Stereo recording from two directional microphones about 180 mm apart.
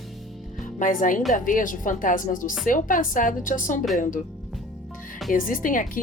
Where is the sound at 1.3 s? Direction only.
45° left (ahead or behind).